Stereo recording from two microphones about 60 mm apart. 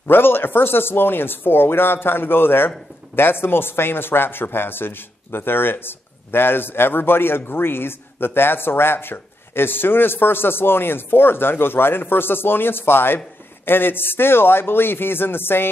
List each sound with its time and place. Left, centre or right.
0.0 s speech: left